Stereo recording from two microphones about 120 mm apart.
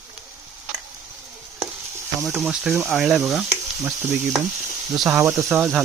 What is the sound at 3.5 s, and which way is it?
Sizzle, 20° right (ahead or behind).